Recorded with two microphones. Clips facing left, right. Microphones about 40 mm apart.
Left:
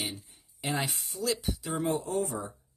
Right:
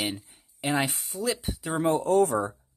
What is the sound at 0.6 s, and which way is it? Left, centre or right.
Speech, right.